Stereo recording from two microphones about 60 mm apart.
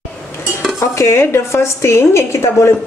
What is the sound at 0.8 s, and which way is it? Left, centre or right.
A woman's voice, left.